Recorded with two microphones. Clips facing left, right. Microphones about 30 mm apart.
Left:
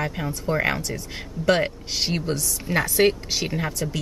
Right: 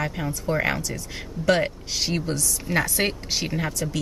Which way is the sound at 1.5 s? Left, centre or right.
Centre.